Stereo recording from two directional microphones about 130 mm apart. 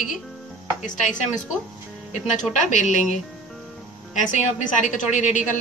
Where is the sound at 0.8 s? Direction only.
80° left.